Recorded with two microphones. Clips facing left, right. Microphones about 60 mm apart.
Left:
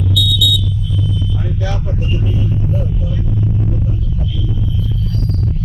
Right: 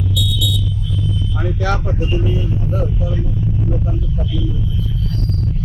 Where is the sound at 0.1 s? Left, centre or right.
Right.